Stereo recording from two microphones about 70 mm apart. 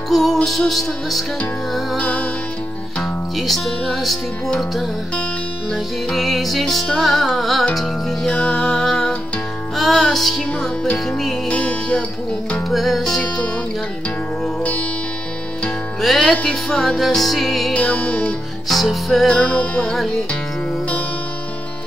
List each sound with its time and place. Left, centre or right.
0.1 s music: centre
2.0 s music: centre
3.3 s music: centre
5.7 s music: centre
11.4 s music: centre
12.6 s music: centre
14.6 s music: centre
16.0 s music: centre
17.7 s music: centre
18.7 s music: centre
19.5 s music: centre
19.9 s music: centre